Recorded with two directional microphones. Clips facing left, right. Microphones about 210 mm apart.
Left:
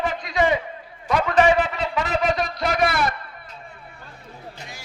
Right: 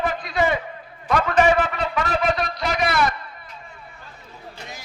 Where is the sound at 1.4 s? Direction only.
20° left (ahead or behind).